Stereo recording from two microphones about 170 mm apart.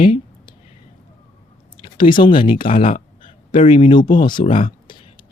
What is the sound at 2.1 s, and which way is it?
Speech, 30° left (ahead or behind).